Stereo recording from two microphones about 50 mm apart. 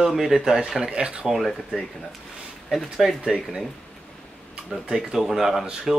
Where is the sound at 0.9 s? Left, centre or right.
Right.